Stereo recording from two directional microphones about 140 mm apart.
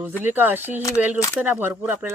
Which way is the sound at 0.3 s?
15° right (ahead or behind).